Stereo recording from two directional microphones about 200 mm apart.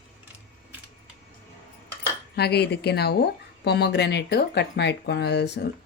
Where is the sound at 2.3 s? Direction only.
55° left (ahead or behind).